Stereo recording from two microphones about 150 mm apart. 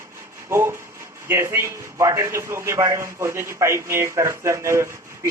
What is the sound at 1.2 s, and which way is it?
A man's voice, 15° right (ahead or behind).